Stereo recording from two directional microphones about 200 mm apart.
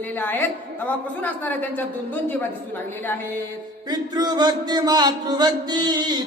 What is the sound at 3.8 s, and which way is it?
Speech, 20° right (ahead or behind).